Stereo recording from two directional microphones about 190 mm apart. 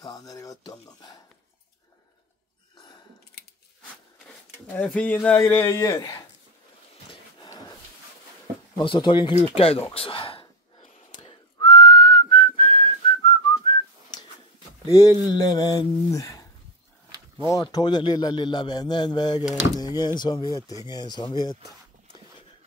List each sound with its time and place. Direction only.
0.0 s a man's voice: 20° left (ahead or behind)
4.7 s a man's voice: 10° left (ahead or behind)
7.4 s a sound: 20° left (ahead or behind)
8.7 s a man's voice: 25° left (ahead or behind)
9.6 s a sound: 30° left (ahead or behind)
14.9 s a man's voice: 20° left (ahead or behind)
17.5 s a man's voice: 20° left (ahead or behind)